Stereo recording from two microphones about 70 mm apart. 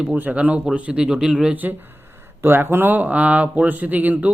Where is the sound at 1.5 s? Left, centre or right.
Right.